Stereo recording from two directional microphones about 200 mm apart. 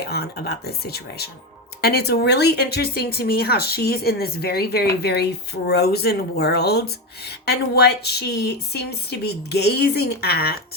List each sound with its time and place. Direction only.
0.0 s speech: 50° left (ahead or behind)